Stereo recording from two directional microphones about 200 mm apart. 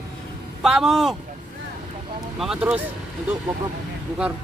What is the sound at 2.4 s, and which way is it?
Speech, 5° right (ahead or behind).